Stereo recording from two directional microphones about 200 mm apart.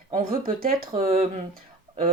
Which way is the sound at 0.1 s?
45° right (ahead or behind).